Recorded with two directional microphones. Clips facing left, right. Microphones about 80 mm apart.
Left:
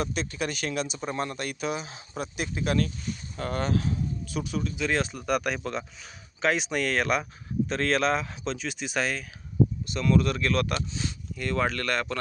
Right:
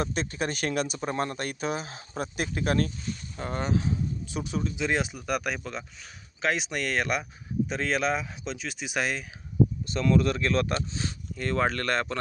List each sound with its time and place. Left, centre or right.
0.0 s speech: right
3.3 s speech: centre
4.4 s speech: right
4.9 s speech: centre
5.2 s speech: centre
9.8 s speech: right